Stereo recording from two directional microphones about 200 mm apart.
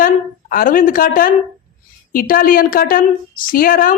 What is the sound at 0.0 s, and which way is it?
A woman's voice, 45° left (ahead or behind).